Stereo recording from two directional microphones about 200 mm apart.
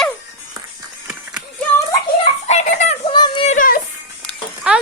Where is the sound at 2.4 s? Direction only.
35° left (ahead or behind).